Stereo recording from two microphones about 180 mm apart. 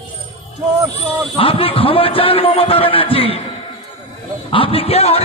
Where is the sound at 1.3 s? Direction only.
30° left (ahead or behind).